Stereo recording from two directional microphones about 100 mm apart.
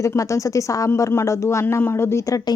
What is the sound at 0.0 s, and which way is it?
A woman's voice, 30° left (ahead or behind).